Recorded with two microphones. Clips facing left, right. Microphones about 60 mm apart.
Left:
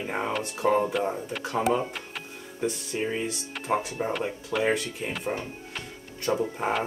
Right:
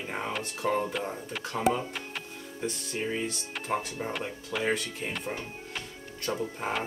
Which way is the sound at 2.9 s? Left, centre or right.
Centre.